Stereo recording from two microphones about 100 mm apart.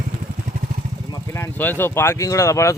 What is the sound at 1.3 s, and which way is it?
Speech, 25° left (ahead or behind).